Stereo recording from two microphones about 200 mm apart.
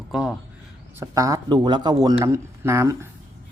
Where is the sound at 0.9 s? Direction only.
15° right (ahead or behind).